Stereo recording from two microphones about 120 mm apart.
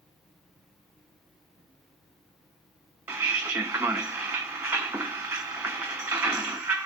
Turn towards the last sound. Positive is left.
turn(degrees=-15)  # may be behind; listen again after turning